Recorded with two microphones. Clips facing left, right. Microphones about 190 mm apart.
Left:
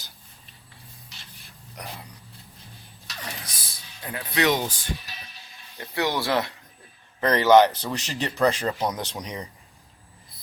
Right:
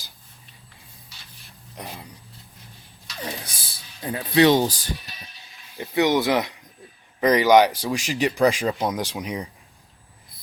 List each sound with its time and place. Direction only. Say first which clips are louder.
1.7 s speech: right 2 dB; 20° right (ahead or behind)
3.4 s rub: right 2 dB; 30° right (ahead or behind)
5.7 s speech: right 6 dB; 15° right (ahead or behind)